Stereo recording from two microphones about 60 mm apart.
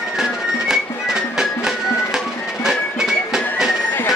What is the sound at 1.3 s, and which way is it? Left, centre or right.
Music, centre.